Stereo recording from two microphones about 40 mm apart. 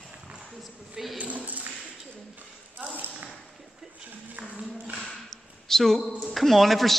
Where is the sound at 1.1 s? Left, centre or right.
Right.